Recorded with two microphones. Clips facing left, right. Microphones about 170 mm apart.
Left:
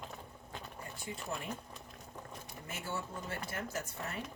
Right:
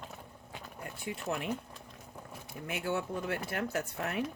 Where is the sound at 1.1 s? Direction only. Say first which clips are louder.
Right 5 dB; 70° right (ahead or behind).